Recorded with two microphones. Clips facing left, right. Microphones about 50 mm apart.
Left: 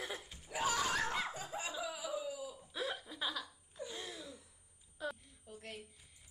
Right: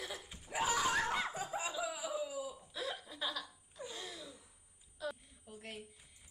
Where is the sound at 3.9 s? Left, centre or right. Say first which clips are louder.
Left 1 dB; left.